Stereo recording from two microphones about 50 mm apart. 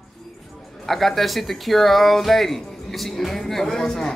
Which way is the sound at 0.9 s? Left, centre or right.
Centre.